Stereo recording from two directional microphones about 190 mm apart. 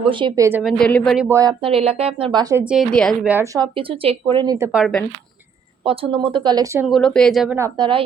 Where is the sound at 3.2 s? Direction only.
10° right (ahead or behind).